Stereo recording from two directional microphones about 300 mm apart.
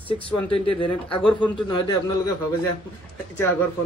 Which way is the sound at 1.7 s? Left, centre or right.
Centre.